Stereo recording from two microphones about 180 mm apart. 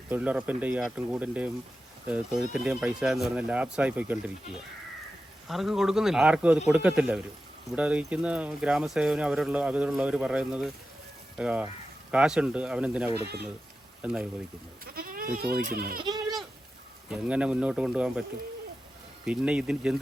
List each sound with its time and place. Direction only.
0.1 s speech: 5° right (ahead or behind)
13.1 s speech: 65° right (ahead or behind)
14.0 s speech: 5° right (ahead or behind)
14.8 s speech: 55° right (ahead or behind)
16.0 s goat: 25° right (ahead or behind)
17.1 s speech: 5° right (ahead or behind)
19.2 s speech: 5° right (ahead or behind)